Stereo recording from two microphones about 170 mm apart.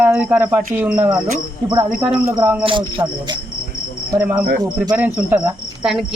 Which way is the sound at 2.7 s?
30° right (ahead or behind).